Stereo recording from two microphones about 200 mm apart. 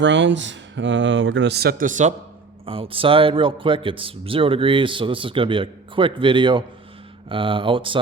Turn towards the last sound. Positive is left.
turn(degrees=-25)  # may be behind; listen again after turning